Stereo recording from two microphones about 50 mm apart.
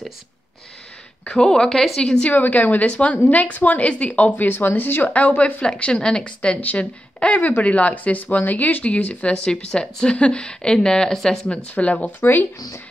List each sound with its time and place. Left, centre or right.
1.2 s a woman's voice: centre
2.0 s speech: left
2.3 s a woman's voice: left
5.6 s a woman's voice: left
11.5 s speech: left
12.2 s speech: left